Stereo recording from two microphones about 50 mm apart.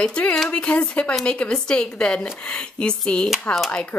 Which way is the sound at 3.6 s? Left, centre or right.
Left.